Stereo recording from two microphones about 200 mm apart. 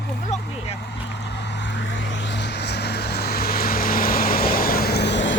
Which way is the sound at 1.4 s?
60° left (ahead or behind).